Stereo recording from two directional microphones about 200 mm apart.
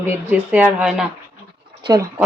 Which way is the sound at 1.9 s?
15° right (ahead or behind).